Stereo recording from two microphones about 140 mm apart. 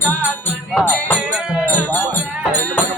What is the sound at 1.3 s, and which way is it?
Music, 5° right (ahead or behind).